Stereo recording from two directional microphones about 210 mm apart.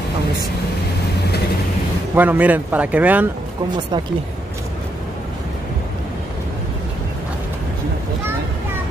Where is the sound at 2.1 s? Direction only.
10° right (ahead or behind).